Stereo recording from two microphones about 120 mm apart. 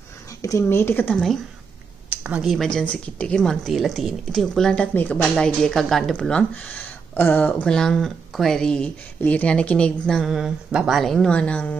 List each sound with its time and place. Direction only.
0.4 s a woman's voice: 25° left (ahead or behind)
2.0 s speech: 10° right (ahead or behind)
2.8 s speech: 10° left (ahead or behind)